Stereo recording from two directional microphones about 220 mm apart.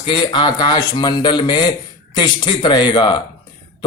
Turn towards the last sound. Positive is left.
turn(degrees=20)  # may be behind; listen again after turning